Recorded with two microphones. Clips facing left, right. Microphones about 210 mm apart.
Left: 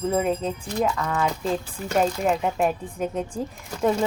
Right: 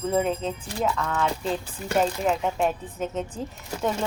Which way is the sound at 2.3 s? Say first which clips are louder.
Left 2 dB; 5° left (ahead or behind).